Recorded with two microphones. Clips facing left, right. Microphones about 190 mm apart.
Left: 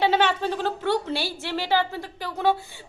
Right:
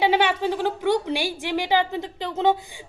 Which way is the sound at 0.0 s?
10° right (ahead or behind).